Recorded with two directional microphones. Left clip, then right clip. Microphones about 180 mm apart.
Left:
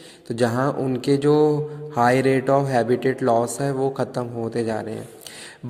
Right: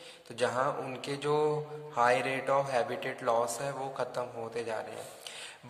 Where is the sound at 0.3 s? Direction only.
40° left (ahead or behind).